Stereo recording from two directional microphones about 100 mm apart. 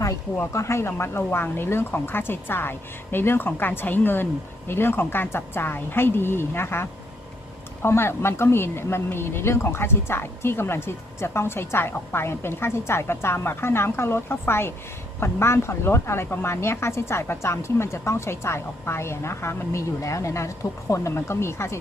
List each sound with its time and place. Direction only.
0.0 s a woman's voice: 30° left (ahead or behind)